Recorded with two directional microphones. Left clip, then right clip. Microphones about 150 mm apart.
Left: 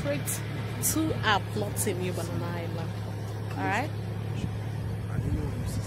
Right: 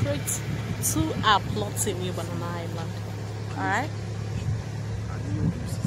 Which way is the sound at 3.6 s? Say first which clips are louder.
Right 3 dB; 10° right (ahead or behind).